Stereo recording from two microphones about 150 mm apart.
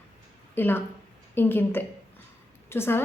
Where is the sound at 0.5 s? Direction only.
15° left (ahead or behind).